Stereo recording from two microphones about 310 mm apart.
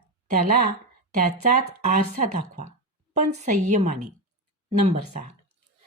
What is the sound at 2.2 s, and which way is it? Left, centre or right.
Speech, right.